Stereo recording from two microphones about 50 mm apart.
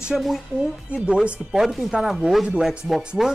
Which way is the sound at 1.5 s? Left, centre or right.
Centre.